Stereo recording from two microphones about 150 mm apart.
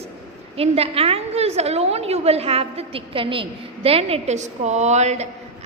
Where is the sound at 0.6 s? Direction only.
40° right (ahead or behind).